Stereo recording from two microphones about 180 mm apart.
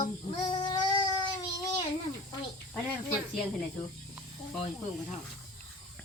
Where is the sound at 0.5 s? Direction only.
25° left (ahead or behind).